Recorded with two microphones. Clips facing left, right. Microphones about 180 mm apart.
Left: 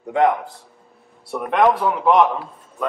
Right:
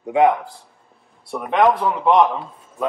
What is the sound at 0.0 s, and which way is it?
A man's voice, 5° right (ahead or behind).